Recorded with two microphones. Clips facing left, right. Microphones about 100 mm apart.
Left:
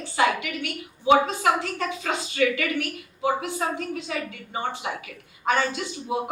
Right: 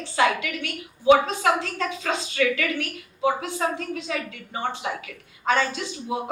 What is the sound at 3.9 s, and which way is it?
Speech, 30° left (ahead or behind).